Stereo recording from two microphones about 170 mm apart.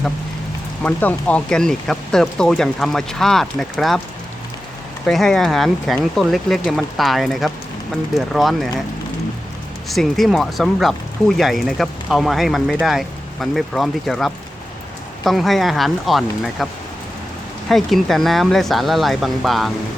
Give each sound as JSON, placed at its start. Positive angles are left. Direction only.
{"t": 0.8, "sound": "speech", "side_deg": 10}
{"t": 5.0, "sound": "speech", "side_deg": 5}
{"t": 9.9, "sound": "speech", "side_deg": 0}
{"t": 17.7, "sound": "speech", "side_deg": 0}